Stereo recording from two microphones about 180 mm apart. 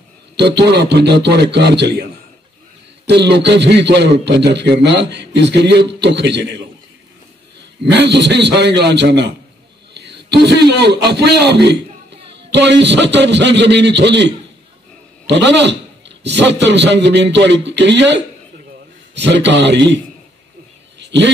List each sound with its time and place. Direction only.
0.4 s a man's voice: 70° right (ahead or behind)
3.1 s a man's voice: 70° right (ahead or behind)
7.8 s a man's voice: 70° right (ahead or behind)
19.4 s a man's voice: 80° right
21.0 s a sound: 75° right (ahead or behind)